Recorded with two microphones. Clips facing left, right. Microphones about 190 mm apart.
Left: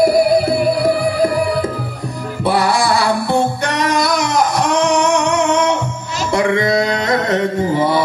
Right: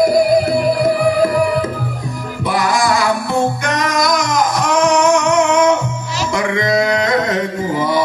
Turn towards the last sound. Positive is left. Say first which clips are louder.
# left 2 dB
turn(degrees=30)  # may be behind; listen again after turning